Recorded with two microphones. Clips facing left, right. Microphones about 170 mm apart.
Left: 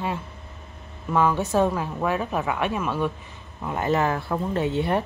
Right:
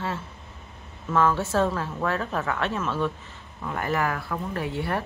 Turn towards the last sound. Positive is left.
turn(degrees=20)  # may be behind; listen again after turning